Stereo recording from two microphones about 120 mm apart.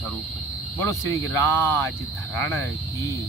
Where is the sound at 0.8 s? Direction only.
25° left (ahead or behind).